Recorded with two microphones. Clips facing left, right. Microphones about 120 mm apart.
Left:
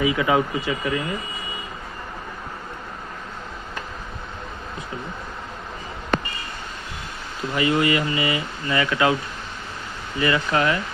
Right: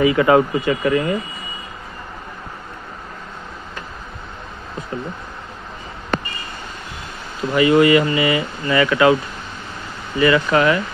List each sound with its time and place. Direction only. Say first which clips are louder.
0.0 s speech: right 6 dB; 55° right (ahead or behind)
7.5 s speech: right 8 dB; 80° right
10.2 s speech: right 6 dB; 90° right